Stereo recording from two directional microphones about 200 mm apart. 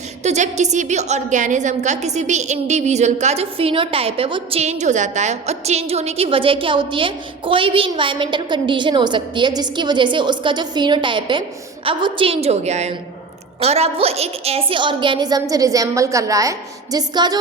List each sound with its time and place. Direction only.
0.2 s a woman's voice: 35° right (ahead or behind); by 17.3 s 20° right (ahead or behind)